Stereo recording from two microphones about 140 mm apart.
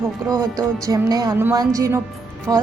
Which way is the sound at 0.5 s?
25° right (ahead or behind).